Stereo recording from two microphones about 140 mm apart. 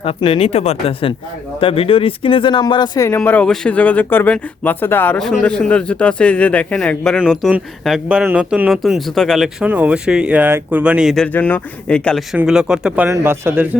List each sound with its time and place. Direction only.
0.0 s speech: 40° left (ahead or behind)
3.2 s speech: 10° left (ahead or behind)
7.2 s speech: 5° right (ahead or behind)
9.6 s speech: 10° right (ahead or behind)
11.3 s speech: 10° left (ahead or behind)
12.3 s speech: 5° right (ahead or behind)
13.1 s speech: 15° right (ahead or behind)